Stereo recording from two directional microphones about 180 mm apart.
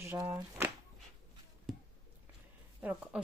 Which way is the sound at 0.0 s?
15° right (ahead or behind).